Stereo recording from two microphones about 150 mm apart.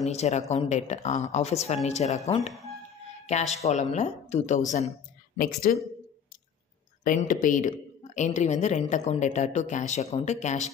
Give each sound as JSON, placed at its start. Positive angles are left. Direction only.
{"t": 0.0, "sound": "a woman's voice", "side_deg": 45}
{"t": 3.5, "sound": "a woman's voice", "side_deg": 50}
{"t": 5.4, "sound": "speech", "side_deg": 70}
{"t": 7.1, "sound": "a woman's voice", "side_deg": 60}